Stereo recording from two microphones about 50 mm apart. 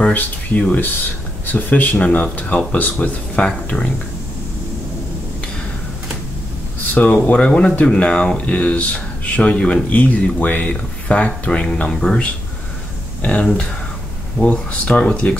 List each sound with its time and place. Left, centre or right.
0.1 s speech: left
6.9 s speech: left
7.3 s speech: left
11.9 s speech: centre
13.2 s speech: left